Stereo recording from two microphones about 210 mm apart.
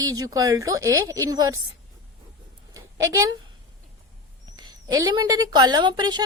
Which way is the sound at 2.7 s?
15° right (ahead or behind).